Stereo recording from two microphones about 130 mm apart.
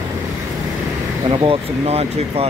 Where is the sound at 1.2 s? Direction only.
35° right (ahead or behind).